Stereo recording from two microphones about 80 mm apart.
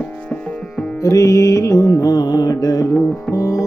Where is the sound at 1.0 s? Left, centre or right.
Left.